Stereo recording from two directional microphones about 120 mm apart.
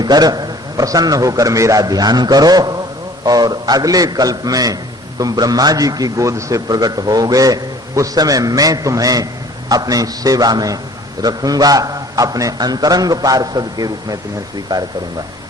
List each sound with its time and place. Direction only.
0.0 s a man's voice: 35° right (ahead or behind)